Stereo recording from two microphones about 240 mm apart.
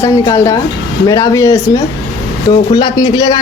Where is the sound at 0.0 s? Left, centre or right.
Centre.